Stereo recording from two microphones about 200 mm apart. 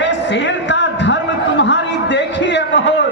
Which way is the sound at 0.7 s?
65° left (ahead or behind).